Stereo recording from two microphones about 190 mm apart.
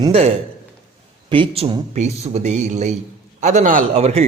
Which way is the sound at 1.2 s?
25° right (ahead or behind).